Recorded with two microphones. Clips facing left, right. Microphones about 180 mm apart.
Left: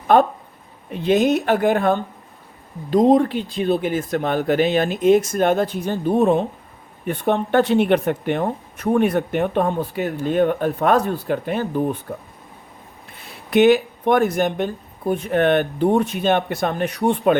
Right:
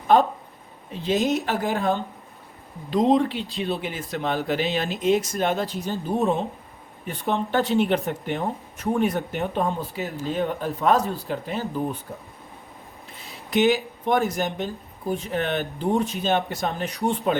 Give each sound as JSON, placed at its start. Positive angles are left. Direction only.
{"t": 0.1, "sound": "speech", "side_deg": 60}
{"t": 2.9, "sound": "speech", "side_deg": 50}